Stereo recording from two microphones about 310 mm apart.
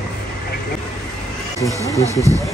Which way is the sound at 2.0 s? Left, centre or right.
Centre.